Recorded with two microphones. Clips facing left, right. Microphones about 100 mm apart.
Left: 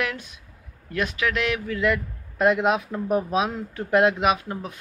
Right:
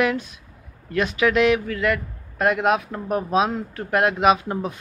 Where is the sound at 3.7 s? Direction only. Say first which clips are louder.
Left 2 dB; 55° right (ahead or behind).